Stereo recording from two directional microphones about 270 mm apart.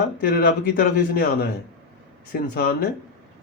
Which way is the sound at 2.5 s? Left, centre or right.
Left.